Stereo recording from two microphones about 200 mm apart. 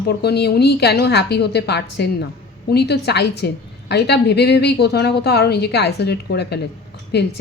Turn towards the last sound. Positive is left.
turn(degrees=55)  # may be behind; listen again after turning